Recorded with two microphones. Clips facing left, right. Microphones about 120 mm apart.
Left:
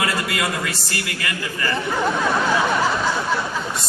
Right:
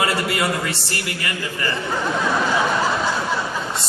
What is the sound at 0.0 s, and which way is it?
A man's voice, 30° right (ahead or behind).